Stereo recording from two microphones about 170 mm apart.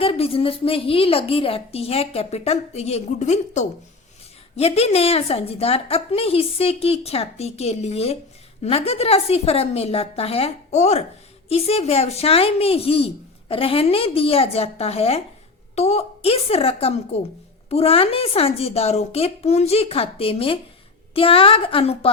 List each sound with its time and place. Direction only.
0.0 s a woman's voice: 35° left (ahead or behind)